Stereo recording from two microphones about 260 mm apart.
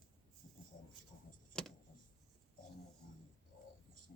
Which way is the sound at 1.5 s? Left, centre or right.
Centre.